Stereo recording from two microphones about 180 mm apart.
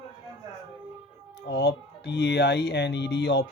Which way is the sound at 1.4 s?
70° left (ahead or behind).